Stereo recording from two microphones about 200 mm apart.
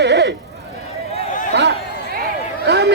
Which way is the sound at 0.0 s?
60° right (ahead or behind).